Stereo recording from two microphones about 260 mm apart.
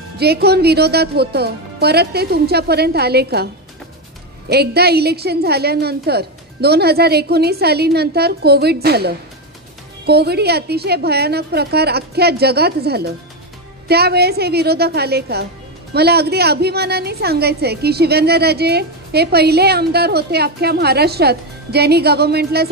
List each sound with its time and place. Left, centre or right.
0.2 s a woman's voice: right
4.5 s a woman's voice: right